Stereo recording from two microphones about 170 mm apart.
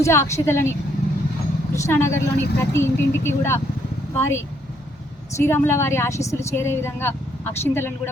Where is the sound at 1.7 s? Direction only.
15° left (ahead or behind).